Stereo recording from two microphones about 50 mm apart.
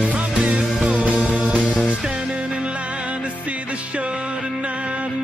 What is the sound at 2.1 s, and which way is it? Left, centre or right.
Music, right.